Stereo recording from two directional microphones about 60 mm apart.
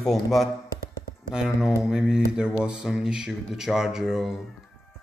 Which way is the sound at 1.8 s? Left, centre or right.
Centre.